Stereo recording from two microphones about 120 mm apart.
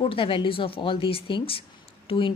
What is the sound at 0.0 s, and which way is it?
A woman's voice, 45° left (ahead or behind).